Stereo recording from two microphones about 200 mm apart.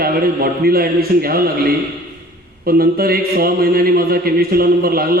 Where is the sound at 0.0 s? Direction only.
50° right (ahead or behind).